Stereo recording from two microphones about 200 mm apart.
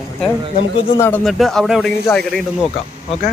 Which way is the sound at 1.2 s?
Centre (ahead or behind).